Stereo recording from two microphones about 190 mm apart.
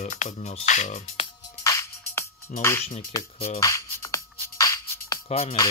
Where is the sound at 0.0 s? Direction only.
40° left (ahead or behind).